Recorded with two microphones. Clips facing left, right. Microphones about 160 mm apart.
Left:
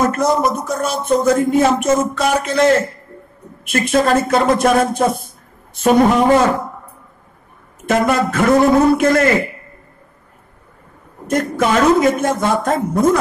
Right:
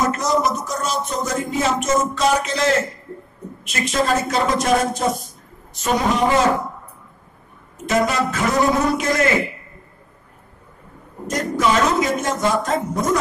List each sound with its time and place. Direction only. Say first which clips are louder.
0.0 s speech: left 4 dB; 55° left (ahead or behind)
3.6 s speech: left 6 dB; 55° left (ahead or behind)
7.9 s speech: left 4 dB; 55° left (ahead or behind)
11.2 s speech: left 3 dB; 55° left (ahead or behind)